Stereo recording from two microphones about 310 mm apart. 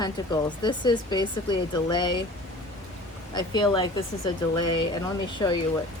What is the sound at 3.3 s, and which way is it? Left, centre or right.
Speech, centre.